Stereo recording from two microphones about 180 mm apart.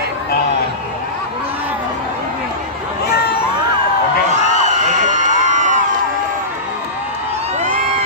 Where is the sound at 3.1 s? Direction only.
60° left (ahead or behind).